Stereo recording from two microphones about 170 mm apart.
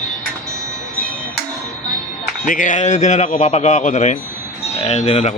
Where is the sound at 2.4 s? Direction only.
50° left (ahead or behind).